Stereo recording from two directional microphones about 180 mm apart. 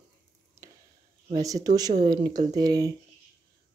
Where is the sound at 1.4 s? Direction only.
20° right (ahead or behind).